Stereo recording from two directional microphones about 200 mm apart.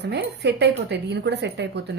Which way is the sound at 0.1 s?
55° right (ahead or behind).